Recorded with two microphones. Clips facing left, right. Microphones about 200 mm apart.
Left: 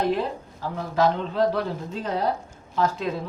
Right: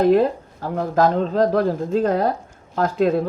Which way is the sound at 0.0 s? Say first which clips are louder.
Right 9 dB; 50° right (ahead or behind).